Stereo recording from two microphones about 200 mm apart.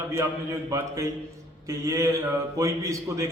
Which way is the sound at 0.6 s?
15° right (ahead or behind).